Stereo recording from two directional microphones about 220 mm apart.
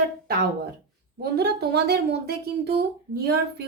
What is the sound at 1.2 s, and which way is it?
Speech, 50° right (ahead or behind).